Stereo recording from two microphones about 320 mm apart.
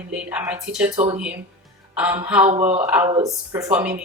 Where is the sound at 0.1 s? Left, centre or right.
Centre.